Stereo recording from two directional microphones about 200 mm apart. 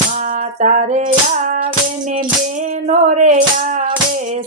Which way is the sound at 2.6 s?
35° right (ahead or behind).